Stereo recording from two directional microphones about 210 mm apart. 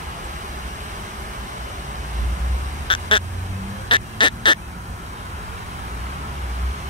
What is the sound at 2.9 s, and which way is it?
Quack, 25° left (ahead or behind).